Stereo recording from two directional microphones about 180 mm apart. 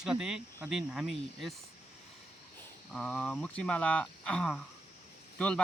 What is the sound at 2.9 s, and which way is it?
Speech, 5° left (ahead or behind).